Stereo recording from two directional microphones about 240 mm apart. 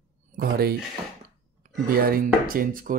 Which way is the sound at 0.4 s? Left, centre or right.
Right.